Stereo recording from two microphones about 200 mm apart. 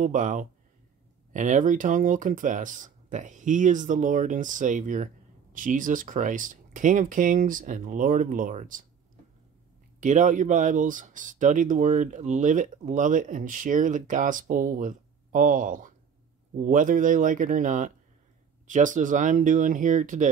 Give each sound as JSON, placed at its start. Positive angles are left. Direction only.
{"t": 0.0, "sound": "speech", "side_deg": -40}
{"t": 9.9, "sound": "speech", "side_deg": -40}